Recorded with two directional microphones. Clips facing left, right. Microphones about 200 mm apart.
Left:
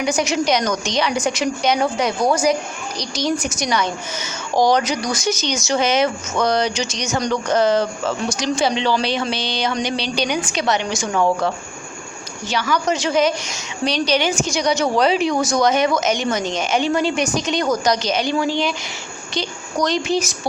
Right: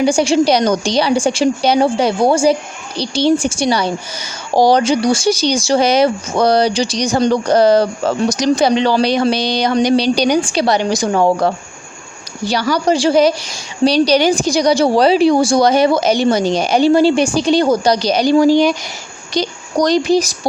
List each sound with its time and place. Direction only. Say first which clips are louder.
0.0 s a woman's voice: right 7 dB; 30° right (ahead or behind)